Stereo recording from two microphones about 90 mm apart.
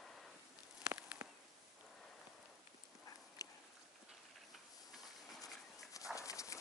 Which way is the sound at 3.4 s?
40° left (ahead or behind).